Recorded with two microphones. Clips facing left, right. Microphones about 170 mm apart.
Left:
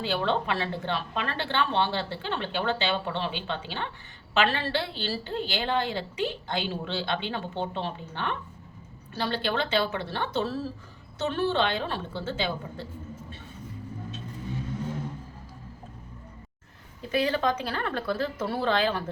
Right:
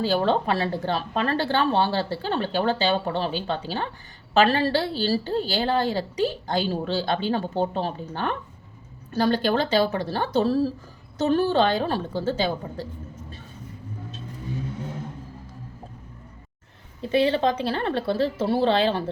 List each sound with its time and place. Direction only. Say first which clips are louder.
0.0 s a woman's voice: right 5 dB; 40° right (ahead or behind)
17.0 s a woman's voice: right 5 dB; 30° right (ahead or behind)